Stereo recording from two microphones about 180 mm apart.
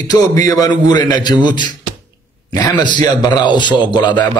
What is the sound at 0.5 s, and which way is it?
A man's voice, 20° left (ahead or behind).